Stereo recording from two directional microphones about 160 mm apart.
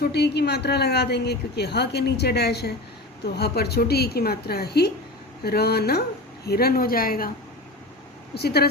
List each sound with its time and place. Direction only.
0.0 s a woman's voice: 90° left; by 7.3 s 65° left (ahead or behind)
8.4 s a woman's voice: 90° left